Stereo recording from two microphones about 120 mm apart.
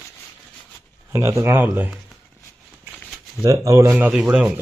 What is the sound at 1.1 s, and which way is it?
Speech, 25° right (ahead or behind).